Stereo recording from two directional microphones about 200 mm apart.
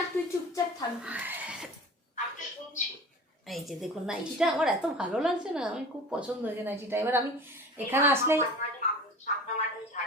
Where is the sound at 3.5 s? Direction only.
Centre (ahead or behind).